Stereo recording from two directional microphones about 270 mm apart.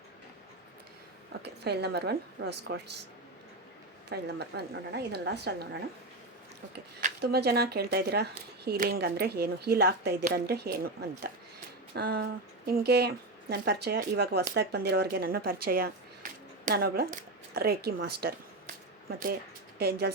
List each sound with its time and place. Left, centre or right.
1.4 s speech: right
4.1 s speech: right
7.0 s speech: right
19.8 s speech: right